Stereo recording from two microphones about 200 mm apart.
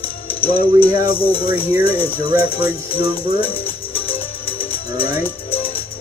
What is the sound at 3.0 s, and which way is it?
Music, 50° left (ahead or behind).